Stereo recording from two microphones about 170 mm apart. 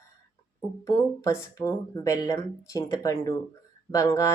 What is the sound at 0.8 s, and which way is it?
Speech, 20° left (ahead or behind).